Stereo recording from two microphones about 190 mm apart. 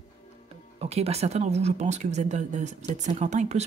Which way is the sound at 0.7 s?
30° right (ahead or behind).